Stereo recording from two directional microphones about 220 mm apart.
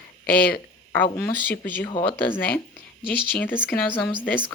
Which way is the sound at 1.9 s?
20° left (ahead or behind).